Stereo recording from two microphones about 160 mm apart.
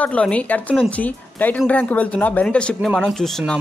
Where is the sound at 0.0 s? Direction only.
10° left (ahead or behind).